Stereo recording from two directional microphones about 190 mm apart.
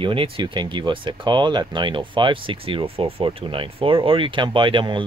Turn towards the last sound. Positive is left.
turn(degrees=-25)  # may be behind; listen again after turning